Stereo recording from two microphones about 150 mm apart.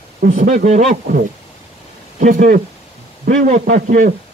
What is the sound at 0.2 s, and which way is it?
A man's voice, 60° right (ahead or behind).